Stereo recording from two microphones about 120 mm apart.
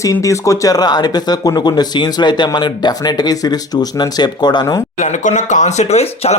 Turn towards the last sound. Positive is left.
turn(degrees=65)  # may be behind; listen again after turning